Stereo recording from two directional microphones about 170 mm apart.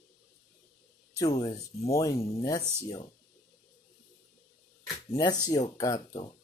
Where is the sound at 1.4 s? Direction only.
20° left (ahead or behind).